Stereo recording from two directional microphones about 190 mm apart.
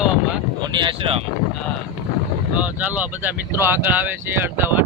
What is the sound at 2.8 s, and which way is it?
Speech, 10° right (ahead or behind).